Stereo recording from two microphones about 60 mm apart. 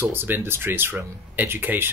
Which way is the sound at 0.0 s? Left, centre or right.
Right.